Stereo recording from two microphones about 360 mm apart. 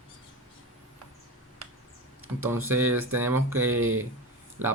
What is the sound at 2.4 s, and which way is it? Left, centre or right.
Speech, centre.